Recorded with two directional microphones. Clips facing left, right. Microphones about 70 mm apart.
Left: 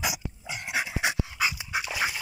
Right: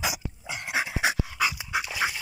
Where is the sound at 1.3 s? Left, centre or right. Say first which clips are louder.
Right 2 dB; right.